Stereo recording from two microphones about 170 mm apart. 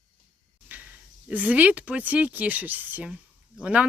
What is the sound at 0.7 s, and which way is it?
Speech, 10° right (ahead or behind).